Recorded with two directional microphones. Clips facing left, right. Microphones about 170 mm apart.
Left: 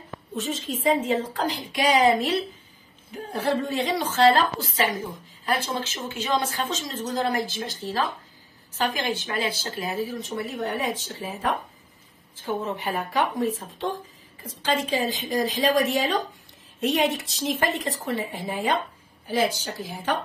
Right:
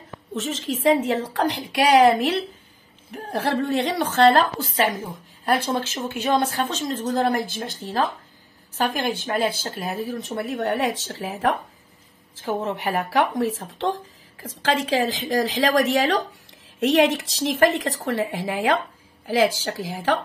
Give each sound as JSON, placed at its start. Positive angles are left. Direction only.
{"t": 0.4, "sound": "speech", "side_deg": -90}
{"t": 0.8, "sound": "a woman's voice", "side_deg": -75}
{"t": 5.8, "sound": "a woman's voice", "side_deg": -55}